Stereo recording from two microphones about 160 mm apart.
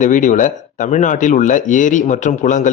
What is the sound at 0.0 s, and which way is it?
A man's voice, 50° left (ahead or behind).